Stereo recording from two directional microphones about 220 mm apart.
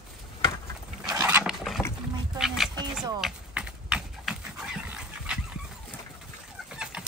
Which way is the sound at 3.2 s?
5° right (ahead or behind).